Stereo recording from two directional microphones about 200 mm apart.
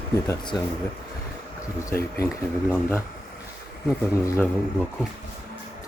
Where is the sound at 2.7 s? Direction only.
10° left (ahead or behind).